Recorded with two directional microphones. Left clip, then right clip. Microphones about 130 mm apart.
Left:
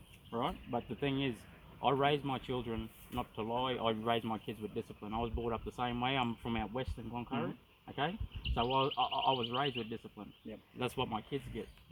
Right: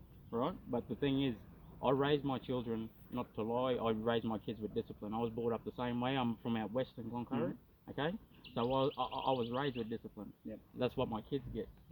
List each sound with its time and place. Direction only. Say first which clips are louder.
0.3 s speech: left 1 dB; 20° left (ahead or behind)
8.5 s speech: left 2 dB; 20° left (ahead or behind)